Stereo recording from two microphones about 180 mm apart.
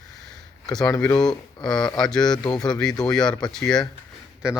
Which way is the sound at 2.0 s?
5° left (ahead or behind).